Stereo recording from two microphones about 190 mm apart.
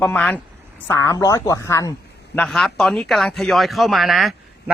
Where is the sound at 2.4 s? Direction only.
Centre (ahead or behind).